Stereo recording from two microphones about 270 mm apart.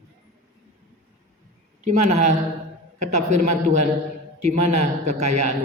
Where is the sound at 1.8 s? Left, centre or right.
Right.